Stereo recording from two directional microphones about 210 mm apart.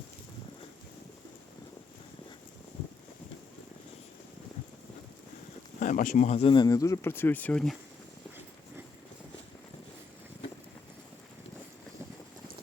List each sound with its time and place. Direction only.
5.8 s speech: 40° left (ahead or behind); by 7.8 s 5° left (ahead or behind)